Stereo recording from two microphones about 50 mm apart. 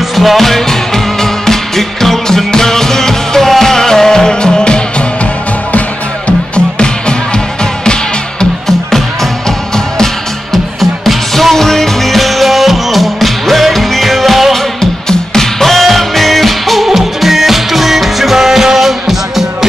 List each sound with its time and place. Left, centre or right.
0.1 s music: centre
8.6 s music: centre
10.5 s music: centre